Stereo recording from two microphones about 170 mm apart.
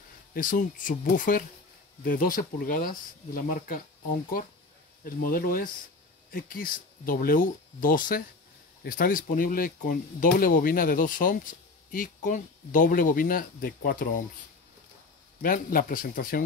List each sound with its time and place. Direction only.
0.3 s speech: 55° left (ahead or behind)
5.0 s speech: 55° left (ahead or behind)
15.4 s speech: 55° left (ahead or behind)